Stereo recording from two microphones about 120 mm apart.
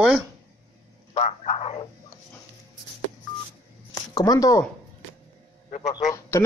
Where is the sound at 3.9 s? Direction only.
30° left (ahead or behind).